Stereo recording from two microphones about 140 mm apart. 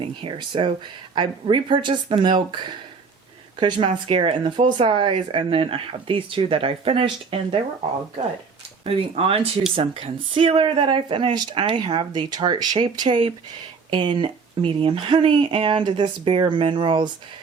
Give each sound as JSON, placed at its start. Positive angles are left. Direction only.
{"t": 0.0, "sound": "speech", "side_deg": -35}
{"t": 8.8, "sound": "speech", "side_deg": -45}